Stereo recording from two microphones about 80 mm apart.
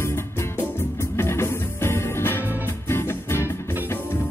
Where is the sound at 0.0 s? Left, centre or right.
Left.